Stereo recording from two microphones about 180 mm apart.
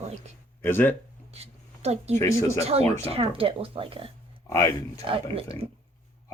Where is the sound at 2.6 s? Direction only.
35° right (ahead or behind).